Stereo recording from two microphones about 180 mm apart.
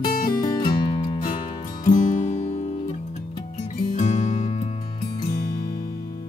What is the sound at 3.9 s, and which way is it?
Music, 40° left (ahead or behind).